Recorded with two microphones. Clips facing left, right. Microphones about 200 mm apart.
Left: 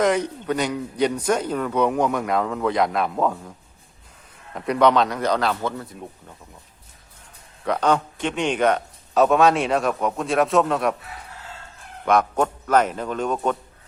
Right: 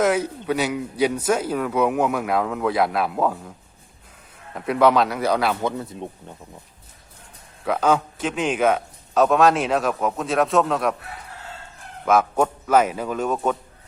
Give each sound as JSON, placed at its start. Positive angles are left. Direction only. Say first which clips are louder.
{"t": 0.0, "sound": "a man's voice", "louder": "even", "side_deg": -5}
{"t": 4.5, "sound": "a man's voice", "louder": "even", "side_deg": 0}
{"t": 5.7, "sound": "speech", "louder": "right 4 dB", "side_deg": -25}
{"t": 7.6, "sound": "a man's voice", "louder": "right 1 dB", "side_deg": -5}
{"t": 12.0, "sound": "a man's voice", "louder": "right 1 dB", "side_deg": -5}